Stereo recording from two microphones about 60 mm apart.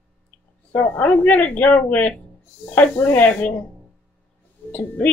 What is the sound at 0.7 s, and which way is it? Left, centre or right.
Speech, left.